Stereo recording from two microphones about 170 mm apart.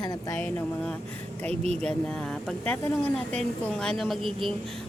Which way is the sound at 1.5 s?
35° right (ahead or behind).